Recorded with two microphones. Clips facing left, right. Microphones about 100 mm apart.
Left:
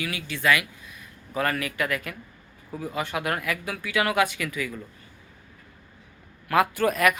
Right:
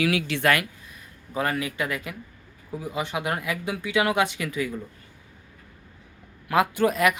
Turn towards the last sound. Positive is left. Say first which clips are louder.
# right 1 dB
turn(degrees=-20)  # may be behind; listen again after turning